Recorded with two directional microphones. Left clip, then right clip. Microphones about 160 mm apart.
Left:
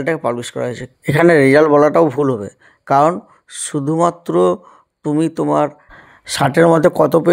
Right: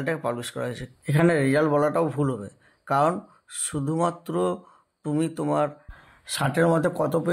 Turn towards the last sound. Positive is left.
turn(degrees=50)  # may be behind; listen again after turning